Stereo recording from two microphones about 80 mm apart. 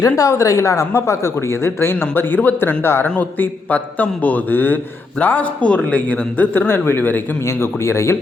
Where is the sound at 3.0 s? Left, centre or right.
Centre.